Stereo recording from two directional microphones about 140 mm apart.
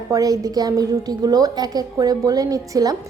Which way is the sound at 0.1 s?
25° right (ahead or behind).